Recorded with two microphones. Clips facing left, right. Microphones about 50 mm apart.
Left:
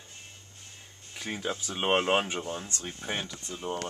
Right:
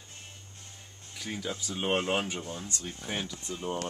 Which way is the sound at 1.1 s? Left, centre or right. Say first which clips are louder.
Left 2 dB; left.